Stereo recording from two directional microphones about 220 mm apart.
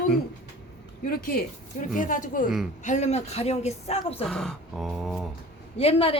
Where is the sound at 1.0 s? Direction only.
40° left (ahead or behind).